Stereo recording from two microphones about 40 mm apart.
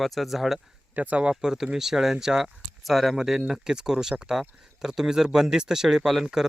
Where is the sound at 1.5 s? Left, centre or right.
Centre.